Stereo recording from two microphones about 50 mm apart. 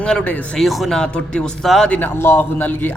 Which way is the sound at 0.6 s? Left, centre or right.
Centre.